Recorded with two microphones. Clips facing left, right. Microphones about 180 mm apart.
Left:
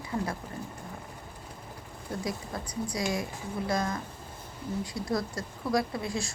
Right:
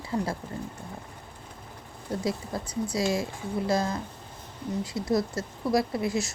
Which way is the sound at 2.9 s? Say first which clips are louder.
Right 4 dB; 25° right (ahead or behind).